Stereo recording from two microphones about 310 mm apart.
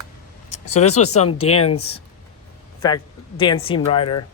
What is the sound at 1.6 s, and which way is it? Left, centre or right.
Speech, centre.